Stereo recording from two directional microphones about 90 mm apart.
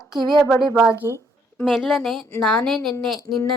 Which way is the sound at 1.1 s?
35° right (ahead or behind).